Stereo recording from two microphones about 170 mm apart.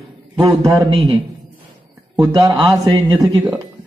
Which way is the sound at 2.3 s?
20° right (ahead or behind).